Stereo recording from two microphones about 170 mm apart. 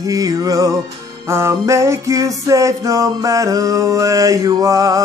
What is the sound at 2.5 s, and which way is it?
Male singing, 20° right (ahead or behind).